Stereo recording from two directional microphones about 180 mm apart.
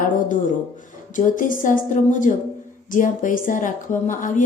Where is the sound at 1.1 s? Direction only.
45° left (ahead or behind).